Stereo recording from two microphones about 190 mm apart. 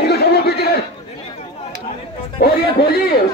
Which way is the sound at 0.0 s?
55° left (ahead or behind).